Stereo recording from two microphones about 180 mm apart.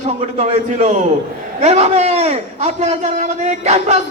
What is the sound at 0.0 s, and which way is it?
A man's voice, 40° right (ahead or behind).